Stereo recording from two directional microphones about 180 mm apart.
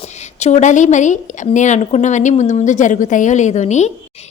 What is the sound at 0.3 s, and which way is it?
A woman's voice, 40° left (ahead or behind).